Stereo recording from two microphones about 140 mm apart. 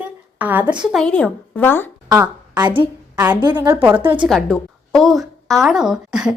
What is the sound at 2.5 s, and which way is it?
Speech, 30° right (ahead or behind).